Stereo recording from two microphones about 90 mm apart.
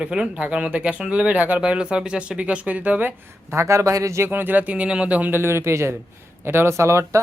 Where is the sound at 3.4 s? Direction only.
35° right (ahead or behind).